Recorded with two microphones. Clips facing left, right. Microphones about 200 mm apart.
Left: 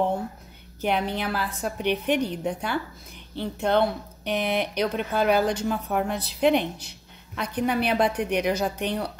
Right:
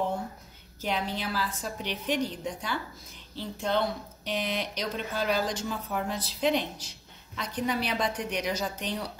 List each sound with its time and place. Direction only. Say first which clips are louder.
0.7 s speech: left 6 dB; 60° left (ahead or behind)